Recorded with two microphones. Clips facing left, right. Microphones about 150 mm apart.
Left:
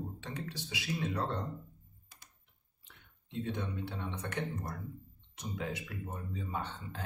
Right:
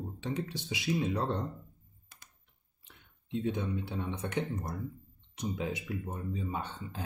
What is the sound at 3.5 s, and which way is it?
Speech, 15° right (ahead or behind).